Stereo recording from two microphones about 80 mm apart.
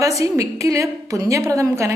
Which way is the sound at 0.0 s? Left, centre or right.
Right.